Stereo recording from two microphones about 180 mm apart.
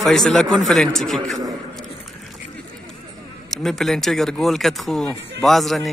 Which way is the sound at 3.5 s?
Centre (ahead or behind).